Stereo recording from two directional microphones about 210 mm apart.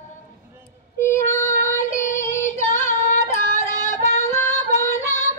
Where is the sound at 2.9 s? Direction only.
35° left (ahead or behind).